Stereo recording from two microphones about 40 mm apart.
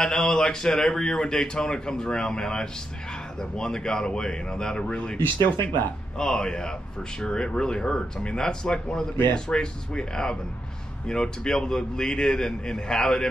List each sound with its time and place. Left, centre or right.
0.3 s speech: centre
5.2 s speech: left
6.1 s speech: centre